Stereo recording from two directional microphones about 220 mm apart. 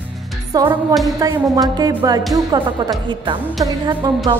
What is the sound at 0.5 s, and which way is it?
Speech, 15° right (ahead or behind).